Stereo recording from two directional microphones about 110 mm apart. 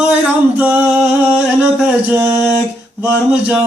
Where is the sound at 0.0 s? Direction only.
15° right (ahead or behind).